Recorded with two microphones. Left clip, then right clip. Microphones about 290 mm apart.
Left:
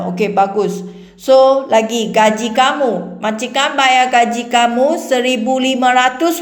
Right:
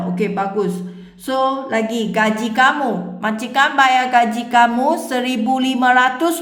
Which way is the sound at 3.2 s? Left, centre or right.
Right.